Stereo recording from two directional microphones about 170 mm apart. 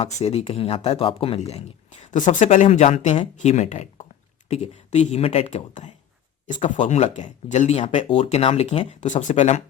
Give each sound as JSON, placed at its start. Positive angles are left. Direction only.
{"t": 0.3, "sound": "speech", "side_deg": 35}